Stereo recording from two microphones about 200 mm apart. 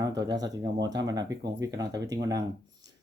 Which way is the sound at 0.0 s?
20° right (ahead or behind).